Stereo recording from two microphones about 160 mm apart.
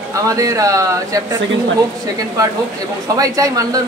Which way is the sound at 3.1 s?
20° right (ahead or behind).